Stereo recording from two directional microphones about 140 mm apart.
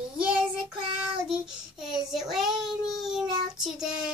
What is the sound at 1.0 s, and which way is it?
Child singing, 5° right (ahead or behind).